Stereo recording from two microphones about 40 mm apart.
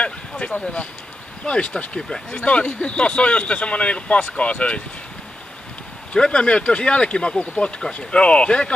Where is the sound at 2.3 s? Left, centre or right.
Left.